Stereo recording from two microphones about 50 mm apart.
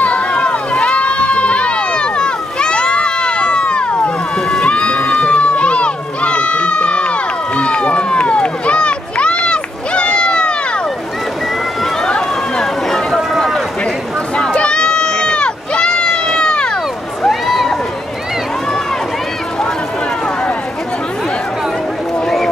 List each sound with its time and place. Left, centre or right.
0.0 s run: left
12.1 s run: centre
14.3 s run: centre
17.3 s run: centre